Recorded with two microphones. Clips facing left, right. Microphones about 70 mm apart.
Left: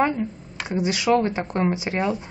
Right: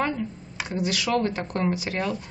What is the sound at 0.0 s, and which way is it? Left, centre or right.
A woman's voice, left.